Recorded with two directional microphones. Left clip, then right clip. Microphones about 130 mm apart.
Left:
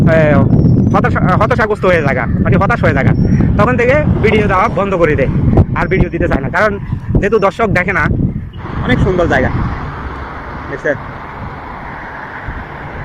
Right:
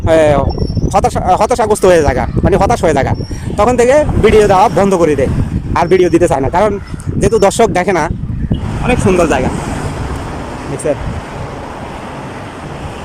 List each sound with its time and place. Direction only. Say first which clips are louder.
0.0 s speech: right 2 dB; 25° right (ahead or behind)
2.5 s speech: right 3 dB; 40° right (ahead or behind)
2.7 s speech: right 2 dB; 25° right (ahead or behind)
8.9 s speech: right 2 dB; 20° right (ahead or behind)
10.8 s speech: even; 25° right (ahead or behind)